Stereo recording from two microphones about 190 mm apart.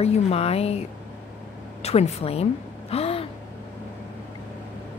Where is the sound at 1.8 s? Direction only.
35° left (ahead or behind).